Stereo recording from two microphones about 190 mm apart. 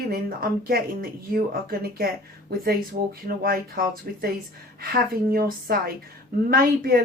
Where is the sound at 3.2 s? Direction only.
50° right (ahead or behind).